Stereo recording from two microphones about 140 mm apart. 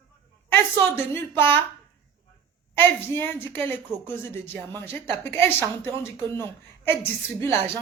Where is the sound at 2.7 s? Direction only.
15° left (ahead or behind).